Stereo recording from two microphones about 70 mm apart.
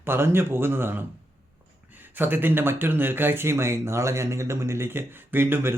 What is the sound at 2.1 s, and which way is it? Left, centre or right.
Speech, right.